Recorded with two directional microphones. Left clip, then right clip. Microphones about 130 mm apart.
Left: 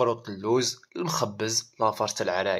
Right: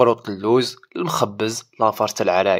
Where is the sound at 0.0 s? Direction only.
45° right (ahead or behind).